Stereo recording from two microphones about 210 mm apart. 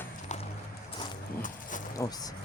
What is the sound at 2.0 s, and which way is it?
Speech, 15° left (ahead or behind).